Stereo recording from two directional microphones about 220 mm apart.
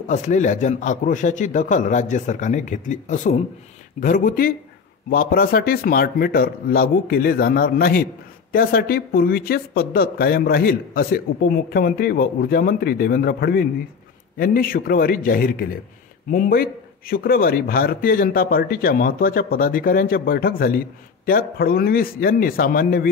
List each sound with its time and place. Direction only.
0.0 s a man's voice: 35° left (ahead or behind)